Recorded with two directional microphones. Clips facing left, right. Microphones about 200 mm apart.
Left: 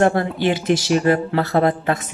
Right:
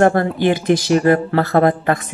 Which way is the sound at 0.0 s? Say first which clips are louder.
Right 3 dB; 50° right (ahead or behind).